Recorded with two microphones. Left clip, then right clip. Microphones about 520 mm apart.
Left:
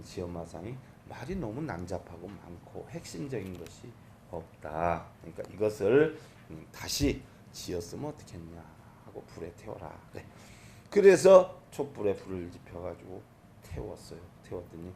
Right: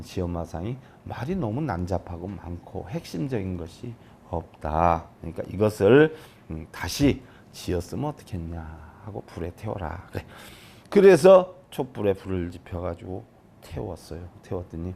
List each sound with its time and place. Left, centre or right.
0.0 s speech: right